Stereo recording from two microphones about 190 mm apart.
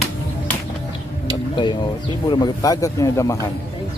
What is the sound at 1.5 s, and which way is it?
Speech, 25° left (ahead or behind).